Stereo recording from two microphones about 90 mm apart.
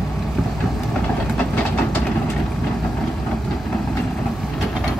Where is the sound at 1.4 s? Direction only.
20° left (ahead or behind).